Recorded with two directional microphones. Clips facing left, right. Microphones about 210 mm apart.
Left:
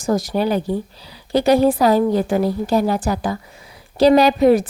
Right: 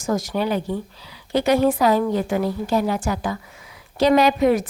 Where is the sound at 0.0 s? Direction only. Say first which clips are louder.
Left 4 dB; 35° left (ahead or behind).